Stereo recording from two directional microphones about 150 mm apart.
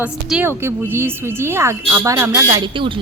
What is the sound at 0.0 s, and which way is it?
A woman's voice, 10° right (ahead or behind).